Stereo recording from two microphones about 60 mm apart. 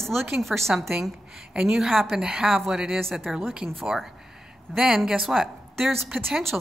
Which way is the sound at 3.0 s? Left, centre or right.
Centre.